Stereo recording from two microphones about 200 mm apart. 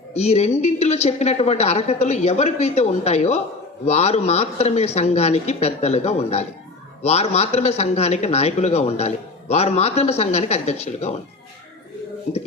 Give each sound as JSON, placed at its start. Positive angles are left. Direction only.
{"t": 0.1, "sound": "a man's voice", "side_deg": 30}